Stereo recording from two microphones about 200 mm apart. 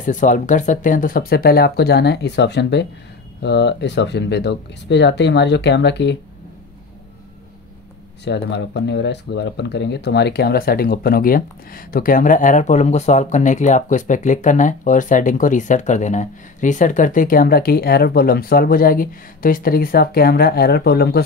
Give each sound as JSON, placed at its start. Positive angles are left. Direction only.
{"t": 0.0, "sound": "speech", "side_deg": 40}
{"t": 8.2, "sound": "speech", "side_deg": 60}